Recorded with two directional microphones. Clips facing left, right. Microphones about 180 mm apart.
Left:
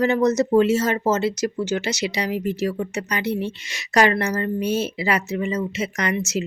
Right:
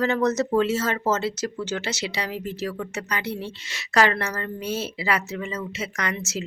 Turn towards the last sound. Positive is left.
turn(degrees=15)  # may be behind; listen again after turning